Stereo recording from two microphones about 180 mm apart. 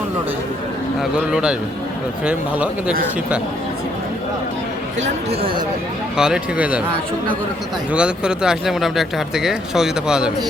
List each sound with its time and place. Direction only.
1.1 s speech: 5° right (ahead or behind)
4.9 s speech: 35° right (ahead or behind)
6.1 s speech: 5° right (ahead or behind)
7.9 s speech: 5° right (ahead or behind)